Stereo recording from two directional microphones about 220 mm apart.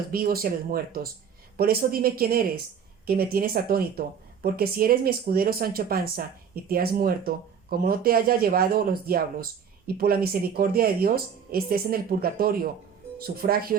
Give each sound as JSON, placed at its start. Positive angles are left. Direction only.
{"t": 0.1, "sound": "speech", "side_deg": -40}